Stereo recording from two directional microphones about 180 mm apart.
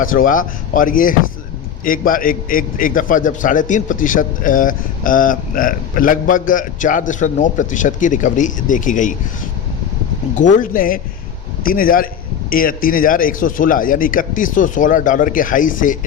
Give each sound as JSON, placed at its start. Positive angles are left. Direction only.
{"t": 0.0, "sound": "a man's voice", "side_deg": 50}
{"t": 10.3, "sound": "a man's voice", "side_deg": 45}